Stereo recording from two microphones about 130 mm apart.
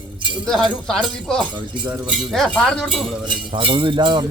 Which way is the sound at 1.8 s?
10° right (ahead or behind).